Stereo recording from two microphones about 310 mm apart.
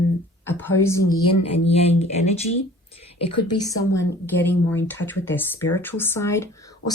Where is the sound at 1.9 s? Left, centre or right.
Left.